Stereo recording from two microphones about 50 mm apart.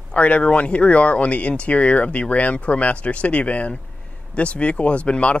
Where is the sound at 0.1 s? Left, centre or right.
Left.